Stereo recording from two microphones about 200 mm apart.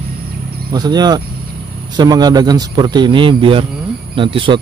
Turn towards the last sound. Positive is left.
turn(degrees=-25)  # may be behind; listen again after turning